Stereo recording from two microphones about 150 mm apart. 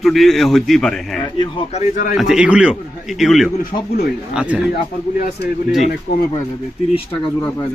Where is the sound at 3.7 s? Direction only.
55° left (ahead or behind).